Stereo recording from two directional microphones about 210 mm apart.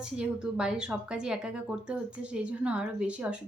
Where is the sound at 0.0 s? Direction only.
5° right (ahead or behind).